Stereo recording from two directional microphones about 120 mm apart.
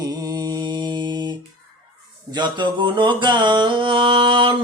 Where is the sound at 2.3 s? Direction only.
35° right (ahead or behind).